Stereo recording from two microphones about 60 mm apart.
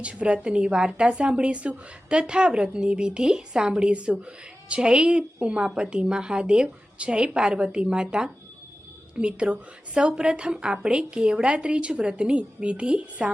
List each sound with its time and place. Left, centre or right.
0.0 s a woman's voice: centre
9.1 s a woman's voice: centre